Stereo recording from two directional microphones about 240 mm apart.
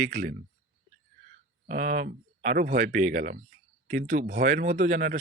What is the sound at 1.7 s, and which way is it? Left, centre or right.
Speech, right.